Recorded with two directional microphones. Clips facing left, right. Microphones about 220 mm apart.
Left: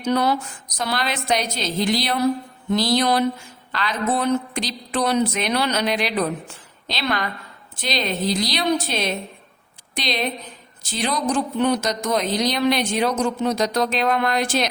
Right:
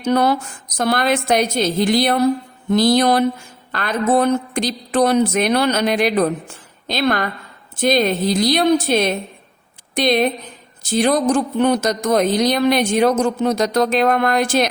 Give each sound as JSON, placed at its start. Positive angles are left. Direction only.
{"t": 0.0, "sound": "a woman's voice", "side_deg": -50}